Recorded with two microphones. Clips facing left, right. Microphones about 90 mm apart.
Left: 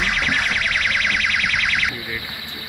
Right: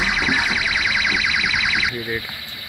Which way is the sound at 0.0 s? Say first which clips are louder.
Right 1 dB; 5° right (ahead or behind).